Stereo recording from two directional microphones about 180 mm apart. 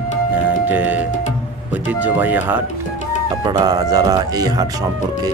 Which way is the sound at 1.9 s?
10° right (ahead or behind).